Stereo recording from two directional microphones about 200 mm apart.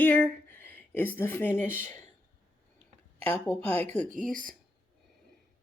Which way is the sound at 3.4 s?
10° left (ahead or behind).